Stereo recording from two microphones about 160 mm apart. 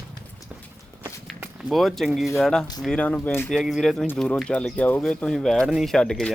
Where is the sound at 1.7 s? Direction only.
Centre (ahead or behind).